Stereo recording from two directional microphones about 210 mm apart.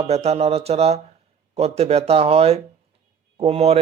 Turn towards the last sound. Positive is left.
turn(degrees=-30)  # may be behind; listen again after turning